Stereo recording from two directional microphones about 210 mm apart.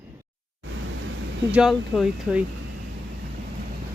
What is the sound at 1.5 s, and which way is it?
Speech, centre (ahead or behind).